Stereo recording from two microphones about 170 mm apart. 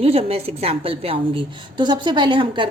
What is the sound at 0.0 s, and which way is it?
A woman's voice, 35° right (ahead or behind).